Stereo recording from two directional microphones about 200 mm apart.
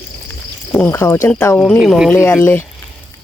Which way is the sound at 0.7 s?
10° left (ahead or behind).